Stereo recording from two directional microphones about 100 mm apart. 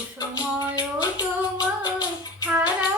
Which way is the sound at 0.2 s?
40° left (ahead or behind).